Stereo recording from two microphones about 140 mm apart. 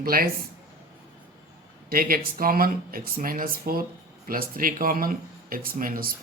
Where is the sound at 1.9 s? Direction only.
90° right.